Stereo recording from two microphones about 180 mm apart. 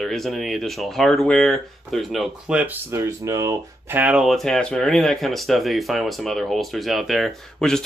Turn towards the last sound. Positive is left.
turn(degrees=0)  # may be behind; listen again after turning